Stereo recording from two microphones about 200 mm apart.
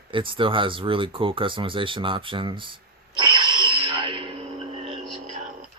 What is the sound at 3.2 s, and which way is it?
Snort, 25° right (ahead or behind).